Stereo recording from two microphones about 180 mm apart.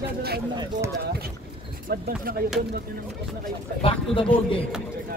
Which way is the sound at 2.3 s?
55° right (ahead or behind).